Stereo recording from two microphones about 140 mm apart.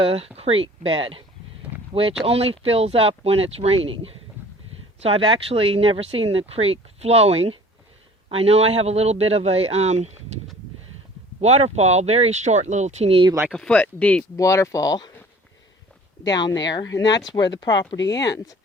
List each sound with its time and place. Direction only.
0.0 s speech: 45° right (ahead or behind)
11.3 s speech: 50° right (ahead or behind)
13.5 s speech: 5° left (ahead or behind)
14.3 s speech: 20° left (ahead or behind)
16.2 s speech: 30° left (ahead or behind)